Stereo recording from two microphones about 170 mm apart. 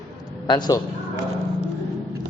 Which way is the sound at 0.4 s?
25° left (ahead or behind).